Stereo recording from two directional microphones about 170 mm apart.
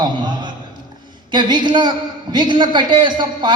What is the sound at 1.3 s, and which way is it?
A man's voice, 25° right (ahead or behind).